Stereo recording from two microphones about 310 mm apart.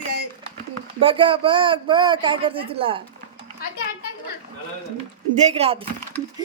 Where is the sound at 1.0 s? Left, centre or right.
Centre.